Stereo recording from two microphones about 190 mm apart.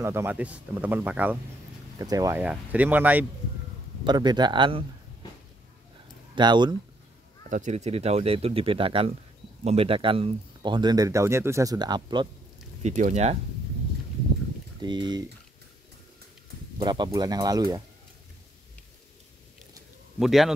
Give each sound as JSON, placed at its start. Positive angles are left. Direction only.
{"t": 0.0, "sound": "speech", "side_deg": -15}
{"t": 2.4, "sound": "speech", "side_deg": -5}
{"t": 4.0, "sound": "speech", "side_deg": -20}
{"t": 6.3, "sound": "speech", "side_deg": -25}
{"t": 7.4, "sound": "speech", "side_deg": -40}
{"t": 12.8, "sound": "speech", "side_deg": -40}
{"t": 14.8, "sound": "speech", "side_deg": -25}
{"t": 16.7, "sound": "speech", "side_deg": -25}
{"t": 20.2, "sound": "speech", "side_deg": 0}